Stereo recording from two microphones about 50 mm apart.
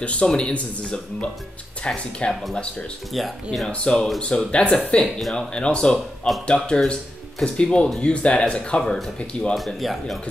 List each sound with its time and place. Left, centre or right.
0.0 s speech: left
3.1 s speech: centre
3.6 s speech: centre
5.9 s speech: centre
6.4 s speech: centre
8.8 s speech: centre
9.3 s speech: centre
9.8 s speech: centre